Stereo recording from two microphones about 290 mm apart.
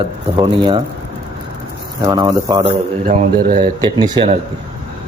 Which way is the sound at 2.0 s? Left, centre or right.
Centre.